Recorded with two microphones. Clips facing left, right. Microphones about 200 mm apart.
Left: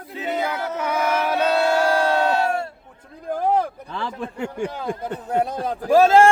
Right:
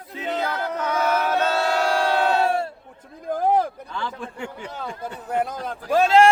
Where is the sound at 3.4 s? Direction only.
10° right (ahead or behind).